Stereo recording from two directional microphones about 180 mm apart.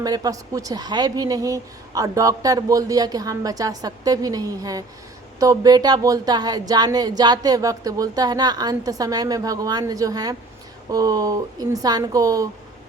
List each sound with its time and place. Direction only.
0.0 s speech: 20° right (ahead or behind)